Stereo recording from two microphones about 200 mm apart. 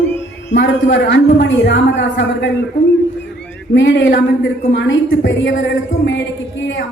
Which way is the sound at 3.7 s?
65° left (ahead or behind).